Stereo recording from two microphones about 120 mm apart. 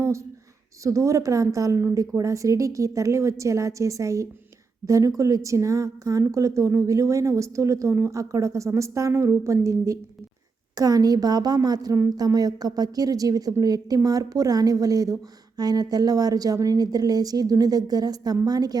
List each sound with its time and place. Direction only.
0.9 s a woman's voice: 25° right (ahead or behind)